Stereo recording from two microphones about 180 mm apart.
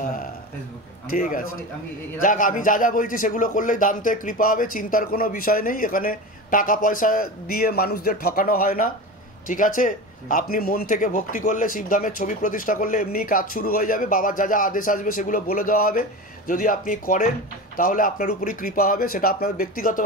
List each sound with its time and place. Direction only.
1.1 s speech: 50° left (ahead or behind)